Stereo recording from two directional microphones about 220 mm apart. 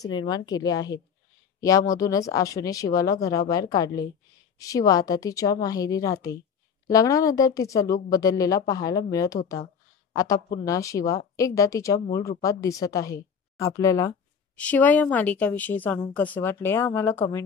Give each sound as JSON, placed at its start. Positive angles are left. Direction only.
{"t": 0.0, "sound": "speech", "side_deg": 20}